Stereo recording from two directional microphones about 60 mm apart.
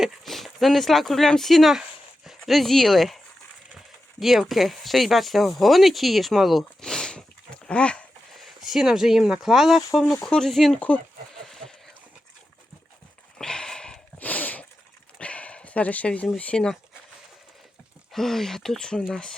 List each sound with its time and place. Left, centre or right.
0.0 s speech: centre
4.2 s speech: centre
8.4 s speech: centre
10.2 s speech: centre
10.8 s speech: left
11.4 s a sound: centre
13.4 s a sound: centre
14.2 s a sound: left
16.4 s speech: centre
18.1 s speech: centre